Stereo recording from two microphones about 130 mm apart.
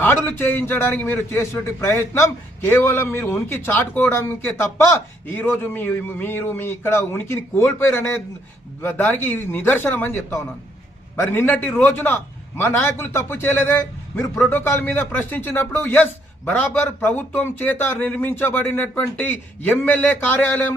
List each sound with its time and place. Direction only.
0.0 s speech: 15° left (ahead or behind)